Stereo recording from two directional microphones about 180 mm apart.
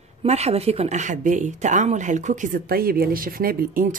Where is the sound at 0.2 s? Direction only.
35° right (ahead or behind).